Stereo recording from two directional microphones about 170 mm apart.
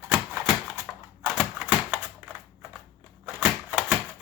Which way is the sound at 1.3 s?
5° right (ahead or behind).